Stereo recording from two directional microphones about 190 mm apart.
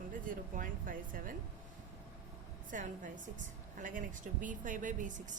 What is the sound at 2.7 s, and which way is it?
A woman's voice, 45° right (ahead or behind).